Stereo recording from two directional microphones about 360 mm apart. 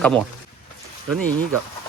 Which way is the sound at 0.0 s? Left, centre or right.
Centre.